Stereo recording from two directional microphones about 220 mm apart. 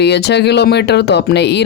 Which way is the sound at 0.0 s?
50° left (ahead or behind).